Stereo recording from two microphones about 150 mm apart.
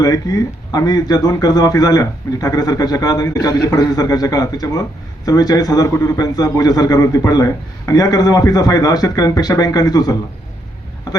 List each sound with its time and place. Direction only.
0.0 s a man's voice: 25° left (ahead or behind)